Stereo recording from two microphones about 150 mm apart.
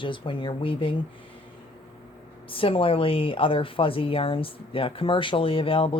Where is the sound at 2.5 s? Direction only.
35° left (ahead or behind).